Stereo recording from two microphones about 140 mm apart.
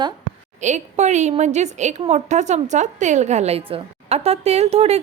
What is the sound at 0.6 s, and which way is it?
A woman's voice, 55° right (ahead or behind).